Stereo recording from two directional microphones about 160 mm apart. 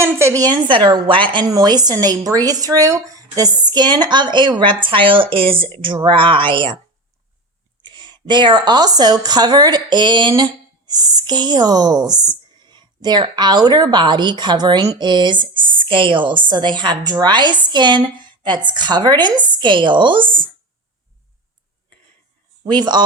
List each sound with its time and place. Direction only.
0.0 s speech: 15° right (ahead or behind); by 6.7 s 30° right (ahead or behind)
7.9 s a woman's voice: 30° right (ahead or behind)
22.6 s speech: 25° right (ahead or behind)